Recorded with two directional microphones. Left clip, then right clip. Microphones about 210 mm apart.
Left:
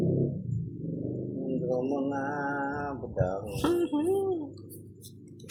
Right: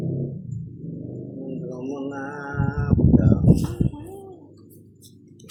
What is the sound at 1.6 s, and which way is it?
Music, 35° right (ahead or behind).